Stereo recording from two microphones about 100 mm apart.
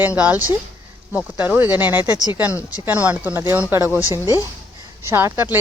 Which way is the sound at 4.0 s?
35° left (ahead or behind).